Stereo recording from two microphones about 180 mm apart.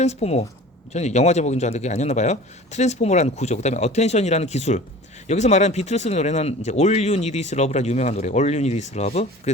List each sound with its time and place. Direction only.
0.0 s speech: 35° left (ahead or behind)